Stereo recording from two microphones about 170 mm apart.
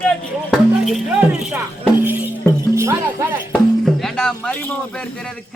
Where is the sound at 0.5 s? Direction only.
Centre (ahead or behind).